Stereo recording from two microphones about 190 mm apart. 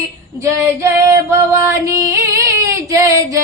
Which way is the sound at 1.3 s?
15° right (ahead or behind).